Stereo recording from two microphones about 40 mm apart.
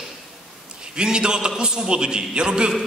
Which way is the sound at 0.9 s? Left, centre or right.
Right.